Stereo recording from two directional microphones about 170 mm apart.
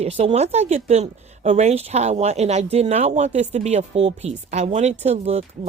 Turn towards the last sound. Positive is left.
turn(degrees=-40)  # may be behind; listen again after turning